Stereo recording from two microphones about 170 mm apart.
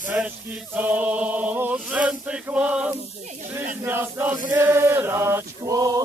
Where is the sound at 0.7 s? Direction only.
10° right (ahead or behind).